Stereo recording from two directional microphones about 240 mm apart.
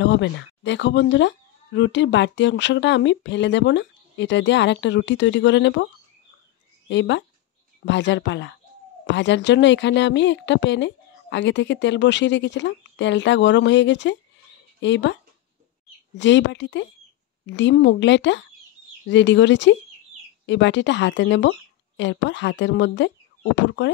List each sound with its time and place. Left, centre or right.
0.0 s speech: left
6.9 s speech: left
16.2 s a woman's voice: left